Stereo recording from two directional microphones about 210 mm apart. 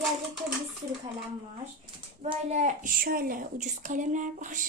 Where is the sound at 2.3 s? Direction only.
35° right (ahead or behind).